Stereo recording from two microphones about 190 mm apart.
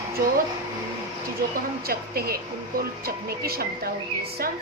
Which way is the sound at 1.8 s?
55° right (ahead or behind).